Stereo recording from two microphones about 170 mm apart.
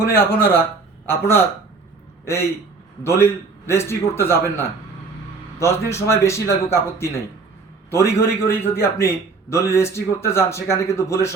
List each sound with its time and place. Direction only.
0.0 s a man's voice: 15° left (ahead or behind)